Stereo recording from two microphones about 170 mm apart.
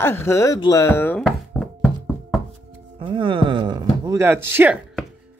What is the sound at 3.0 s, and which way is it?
Speech, 30° right (ahead or behind).